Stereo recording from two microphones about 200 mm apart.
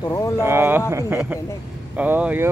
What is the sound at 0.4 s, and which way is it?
A man's voice, 10° right (ahead or behind).